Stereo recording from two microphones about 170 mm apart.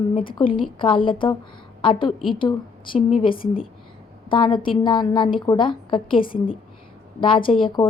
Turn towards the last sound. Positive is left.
turn(degrees=30)  # may be behind; listen again after turning